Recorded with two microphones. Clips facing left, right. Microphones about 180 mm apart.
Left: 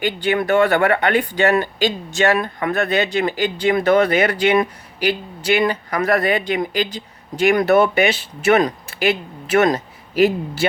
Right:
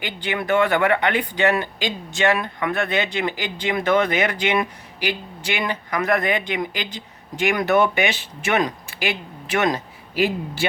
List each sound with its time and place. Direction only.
0.0 s speech: 45° left (ahead or behind)